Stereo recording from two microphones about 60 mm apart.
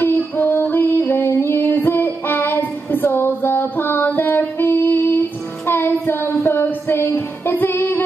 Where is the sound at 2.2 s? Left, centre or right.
Left.